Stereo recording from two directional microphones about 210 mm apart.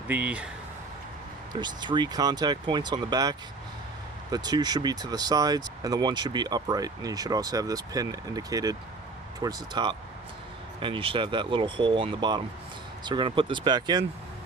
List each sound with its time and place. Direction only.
0.1 s speech: 5° right (ahead or behind)
1.5 s speech: 20° right (ahead or behind)